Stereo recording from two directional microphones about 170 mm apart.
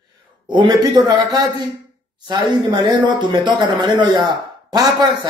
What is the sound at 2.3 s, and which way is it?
Speech, 25° right (ahead or behind).